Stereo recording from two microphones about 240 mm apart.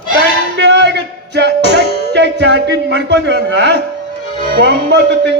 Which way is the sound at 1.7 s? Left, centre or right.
Right.